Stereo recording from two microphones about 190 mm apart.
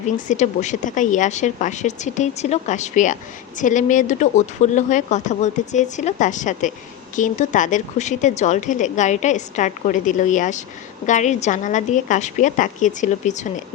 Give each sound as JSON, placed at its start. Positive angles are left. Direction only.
{"t": 0.3, "sound": "a woman's voice", "side_deg": 40}